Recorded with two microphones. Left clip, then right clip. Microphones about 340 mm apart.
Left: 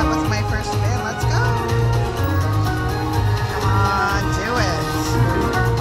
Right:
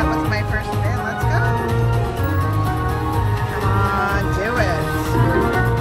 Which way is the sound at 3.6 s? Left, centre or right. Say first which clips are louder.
Left 1 dB; centre.